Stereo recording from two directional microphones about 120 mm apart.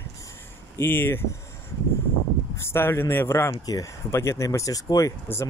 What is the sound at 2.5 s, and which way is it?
Speech, 20° left (ahead or behind).